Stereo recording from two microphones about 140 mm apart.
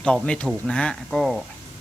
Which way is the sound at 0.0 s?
5° left (ahead or behind).